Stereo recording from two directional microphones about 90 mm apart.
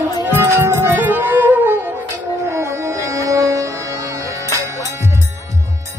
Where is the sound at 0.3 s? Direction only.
30° right (ahead or behind).